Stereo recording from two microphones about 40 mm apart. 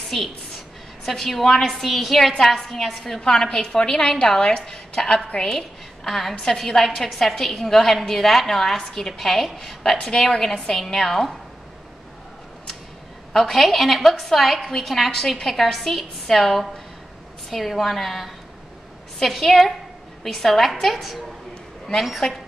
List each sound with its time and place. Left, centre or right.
0.1 s a woman's voice: centre
3.2 s a woman's voice: centre
5.5 s a woman's voice: centre
10.0 s a woman's voice: centre
13.3 s a woman's voice: centre